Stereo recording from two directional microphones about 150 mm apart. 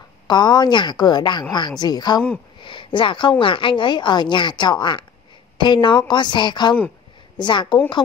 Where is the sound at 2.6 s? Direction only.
35° left (ahead or behind).